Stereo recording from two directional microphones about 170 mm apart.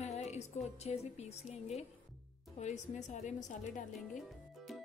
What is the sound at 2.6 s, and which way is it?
Speech, 45° left (ahead or behind).